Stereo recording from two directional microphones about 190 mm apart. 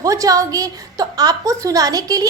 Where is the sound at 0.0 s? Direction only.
20° right (ahead or behind).